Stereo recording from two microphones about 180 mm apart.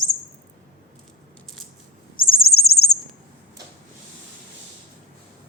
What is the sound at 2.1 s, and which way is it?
Bird, 55° left (ahead or behind).